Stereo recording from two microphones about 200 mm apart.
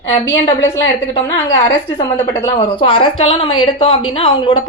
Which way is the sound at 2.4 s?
25° left (ahead or behind).